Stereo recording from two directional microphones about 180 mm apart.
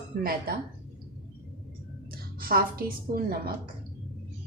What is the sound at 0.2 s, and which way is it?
Speech, 55° right (ahead or behind).